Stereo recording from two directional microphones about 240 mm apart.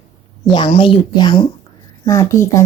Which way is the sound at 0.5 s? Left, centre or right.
Left.